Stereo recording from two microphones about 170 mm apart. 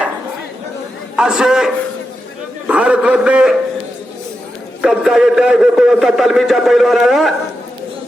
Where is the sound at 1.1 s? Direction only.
5° right (ahead or behind).